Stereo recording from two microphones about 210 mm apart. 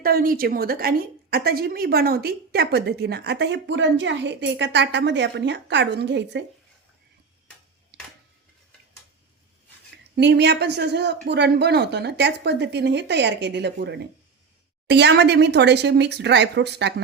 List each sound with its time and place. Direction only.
0.0 s a woman's voice: 45° right (ahead or behind)
7.9 s tick-tock: 50° right (ahead or behind)
10.2 s a woman's voice: 55° right (ahead or behind)